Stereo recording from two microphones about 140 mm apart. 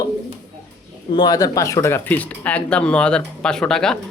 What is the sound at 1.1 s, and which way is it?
Speech, 30° left (ahead or behind).